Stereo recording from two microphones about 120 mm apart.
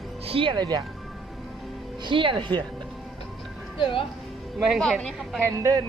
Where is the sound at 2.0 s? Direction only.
45° right (ahead or behind).